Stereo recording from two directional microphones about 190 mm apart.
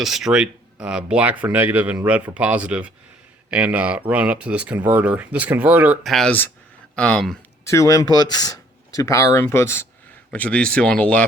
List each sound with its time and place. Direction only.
0.0 s speech: centre (ahead or behind)
7.6 s speech: 15° left (ahead or behind)